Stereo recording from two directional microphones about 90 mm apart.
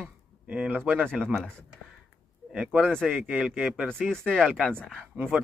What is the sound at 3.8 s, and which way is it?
Speech, 10° left (ahead or behind).